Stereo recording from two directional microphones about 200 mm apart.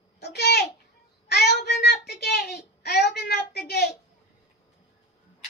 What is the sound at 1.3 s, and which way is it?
Child singing, 55° left (ahead or behind).